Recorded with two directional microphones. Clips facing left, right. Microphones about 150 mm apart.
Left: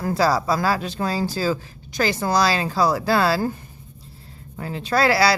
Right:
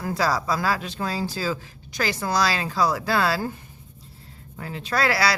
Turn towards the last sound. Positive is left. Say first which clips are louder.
# left 5 dB
turn(degrees=30)  # may be behind; listen again after turning